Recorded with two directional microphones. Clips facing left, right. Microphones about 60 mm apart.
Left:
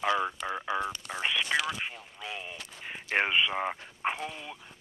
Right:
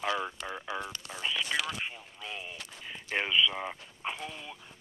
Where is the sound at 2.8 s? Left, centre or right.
Left.